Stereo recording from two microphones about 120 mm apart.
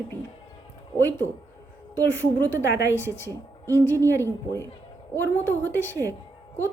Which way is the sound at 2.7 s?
20° right (ahead or behind).